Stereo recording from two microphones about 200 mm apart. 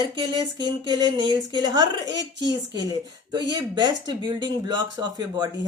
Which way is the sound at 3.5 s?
20° right (ahead or behind).